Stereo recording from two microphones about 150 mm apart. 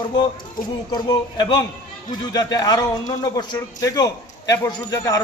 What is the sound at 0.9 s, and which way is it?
A man's voice, 30° left (ahead or behind).